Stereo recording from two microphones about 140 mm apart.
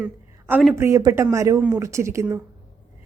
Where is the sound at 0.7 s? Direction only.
20° right (ahead or behind).